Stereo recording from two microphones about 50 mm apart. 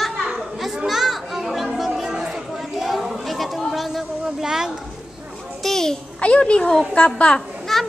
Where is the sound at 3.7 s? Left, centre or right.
Centre.